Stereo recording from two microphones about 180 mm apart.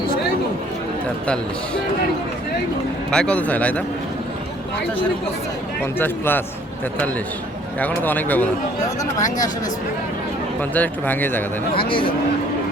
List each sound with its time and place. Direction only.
3.1 s speech: 5° left (ahead or behind)
6.0 s speech: 10° left (ahead or behind)
7.8 s speech: 10° left (ahead or behind)
10.6 s speech: 10° left (ahead or behind)
11.9 s speech: 30° left (ahead or behind)